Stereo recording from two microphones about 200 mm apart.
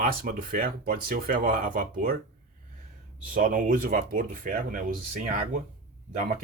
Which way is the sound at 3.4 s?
40° right (ahead or behind).